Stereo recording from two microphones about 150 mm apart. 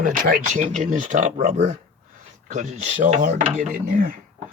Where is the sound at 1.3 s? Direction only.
50° right (ahead or behind).